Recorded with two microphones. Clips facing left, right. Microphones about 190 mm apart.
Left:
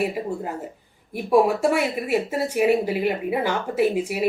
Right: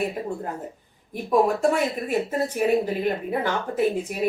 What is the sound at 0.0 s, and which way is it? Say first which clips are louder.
Speech: left 2 dB; 5° left (ahead or behind).